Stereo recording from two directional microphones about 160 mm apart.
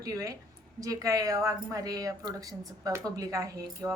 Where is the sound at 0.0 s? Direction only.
20° right (ahead or behind).